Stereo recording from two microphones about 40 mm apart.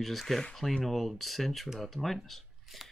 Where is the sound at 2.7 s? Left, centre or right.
Centre.